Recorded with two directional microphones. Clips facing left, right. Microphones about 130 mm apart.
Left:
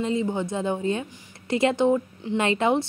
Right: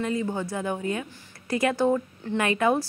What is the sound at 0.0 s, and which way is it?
A woman's voice, 20° left (ahead or behind).